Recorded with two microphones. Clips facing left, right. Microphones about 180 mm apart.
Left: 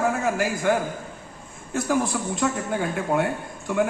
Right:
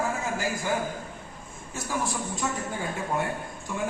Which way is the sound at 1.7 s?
65° left (ahead or behind).